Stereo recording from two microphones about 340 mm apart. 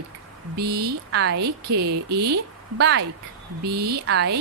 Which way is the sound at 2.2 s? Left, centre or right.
Right.